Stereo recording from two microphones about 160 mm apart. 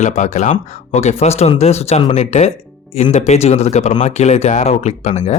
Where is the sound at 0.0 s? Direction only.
50° left (ahead or behind).